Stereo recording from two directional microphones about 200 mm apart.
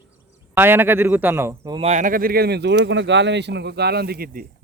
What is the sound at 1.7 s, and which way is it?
Speech, 35° right (ahead or behind).